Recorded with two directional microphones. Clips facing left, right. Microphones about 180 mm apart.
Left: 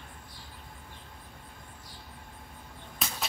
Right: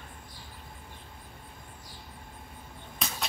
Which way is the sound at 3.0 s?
Centre (ahead or behind).